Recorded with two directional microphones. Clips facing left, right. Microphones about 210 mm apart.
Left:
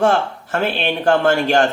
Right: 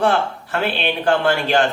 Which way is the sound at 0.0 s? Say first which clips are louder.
Left 2 dB; 45° left (ahead or behind).